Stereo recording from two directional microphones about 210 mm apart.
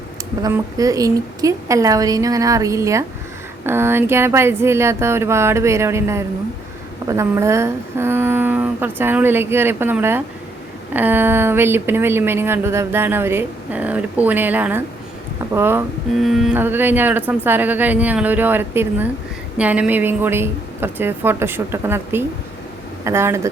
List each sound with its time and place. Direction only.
0.4 s speech: 15° right (ahead or behind)